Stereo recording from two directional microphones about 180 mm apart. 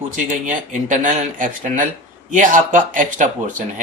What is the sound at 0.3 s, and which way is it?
Speech, 45° right (ahead or behind).